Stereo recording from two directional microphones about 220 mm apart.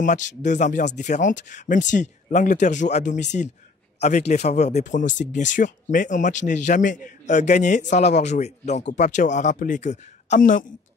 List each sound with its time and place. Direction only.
0.0 s speech: 35° left (ahead or behind)